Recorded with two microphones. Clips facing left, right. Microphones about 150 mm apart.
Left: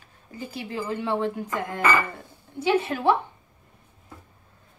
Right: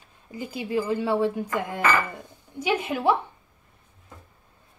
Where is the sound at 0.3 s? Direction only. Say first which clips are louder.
Right 5 dB; 10° right (ahead or behind).